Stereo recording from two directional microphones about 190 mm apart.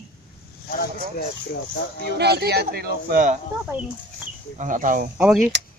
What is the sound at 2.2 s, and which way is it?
Speech, 60° right (ahead or behind).